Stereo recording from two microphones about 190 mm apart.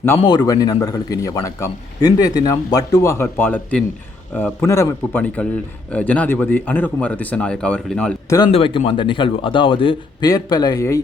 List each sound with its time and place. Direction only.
0.2 s a man's voice: 25° left (ahead or behind); by 8.1 s 5° left (ahead or behind)
8.5 s a man's voice: 30° left (ahead or behind)